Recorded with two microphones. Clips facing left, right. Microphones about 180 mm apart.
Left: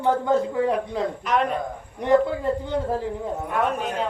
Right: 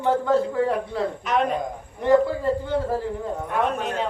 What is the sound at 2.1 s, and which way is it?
Speech, 15° left (ahead or behind).